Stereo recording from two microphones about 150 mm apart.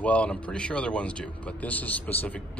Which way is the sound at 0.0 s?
10° left (ahead or behind).